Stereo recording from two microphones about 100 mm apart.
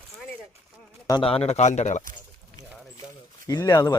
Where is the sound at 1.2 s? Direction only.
70° left (ahead or behind).